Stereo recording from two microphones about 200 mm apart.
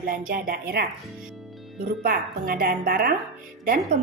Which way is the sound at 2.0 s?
45° right (ahead or behind).